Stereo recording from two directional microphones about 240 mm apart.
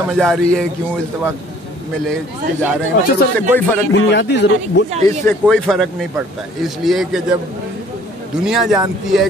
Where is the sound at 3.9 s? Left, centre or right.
Left.